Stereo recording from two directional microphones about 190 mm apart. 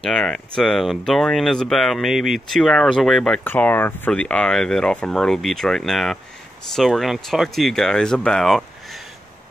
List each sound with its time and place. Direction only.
0.0 s speech: 5° left (ahead or behind)